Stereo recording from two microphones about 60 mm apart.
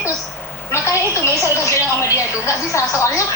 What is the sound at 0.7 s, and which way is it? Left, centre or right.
A woman's voice, left.